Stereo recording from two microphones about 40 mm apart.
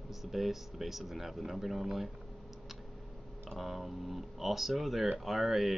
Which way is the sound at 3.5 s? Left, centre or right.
Centre.